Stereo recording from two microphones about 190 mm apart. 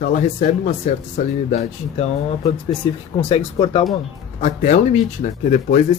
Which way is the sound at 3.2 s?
30° left (ahead or behind).